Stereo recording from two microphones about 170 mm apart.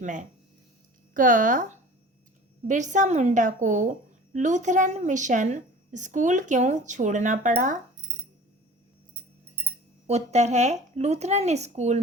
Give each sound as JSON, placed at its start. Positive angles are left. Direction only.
{"t": 0.0, "sound": "a woman's voice", "side_deg": -45}
{"t": 10.1, "sound": "speech", "side_deg": -40}